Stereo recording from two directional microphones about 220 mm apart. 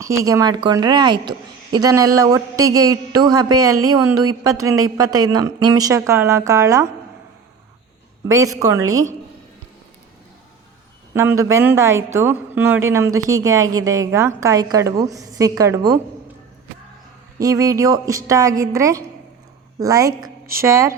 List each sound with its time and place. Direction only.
0.0 s a woman's voice: 15° right (ahead or behind)
8.5 s a woman's voice: 15° right (ahead or behind)
11.1 s a woman's voice: 10° right (ahead or behind)
17.4 s a woman's voice: 15° right (ahead or behind)